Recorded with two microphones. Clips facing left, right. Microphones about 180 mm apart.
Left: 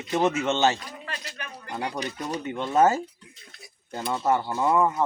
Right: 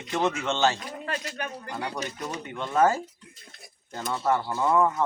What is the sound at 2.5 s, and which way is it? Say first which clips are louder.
Speech: left 2 dB; 20° left (ahead or behind).